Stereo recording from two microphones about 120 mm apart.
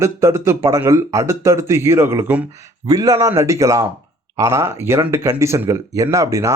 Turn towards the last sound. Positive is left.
turn(degrees=-25)  # may be behind; listen again after turning